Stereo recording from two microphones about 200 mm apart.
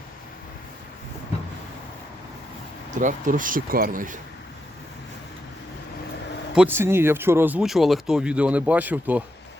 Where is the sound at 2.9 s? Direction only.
40° right (ahead or behind).